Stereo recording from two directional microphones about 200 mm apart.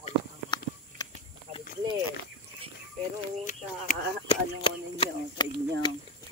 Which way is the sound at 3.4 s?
35° left (ahead or behind).